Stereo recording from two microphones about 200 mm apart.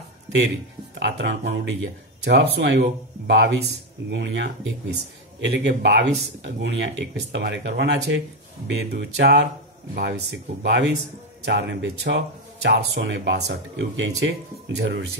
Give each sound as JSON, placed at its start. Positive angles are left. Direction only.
{"t": 0.9, "sound": "speech", "side_deg": -60}
{"t": 5.5, "sound": "speech", "side_deg": -60}